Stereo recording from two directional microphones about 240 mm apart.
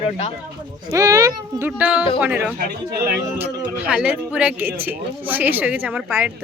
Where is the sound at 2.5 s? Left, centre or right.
Right.